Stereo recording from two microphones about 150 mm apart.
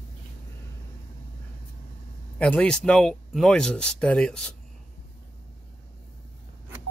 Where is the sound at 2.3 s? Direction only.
5° left (ahead or behind).